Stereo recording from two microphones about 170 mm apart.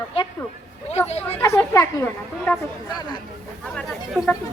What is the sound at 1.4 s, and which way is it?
A woman's voice, 15° left (ahead or behind).